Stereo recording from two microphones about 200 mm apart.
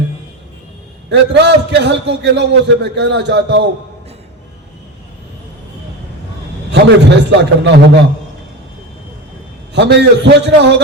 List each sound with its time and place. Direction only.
1.1 s a man's voice: 60° right (ahead or behind)
6.7 s a man's voice: 60° right (ahead or behind)
9.7 s a man's voice: 60° right (ahead or behind)